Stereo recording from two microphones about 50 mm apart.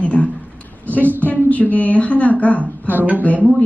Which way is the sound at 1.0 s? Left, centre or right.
Right.